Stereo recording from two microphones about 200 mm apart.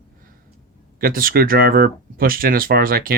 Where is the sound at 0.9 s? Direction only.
45° right (ahead or behind).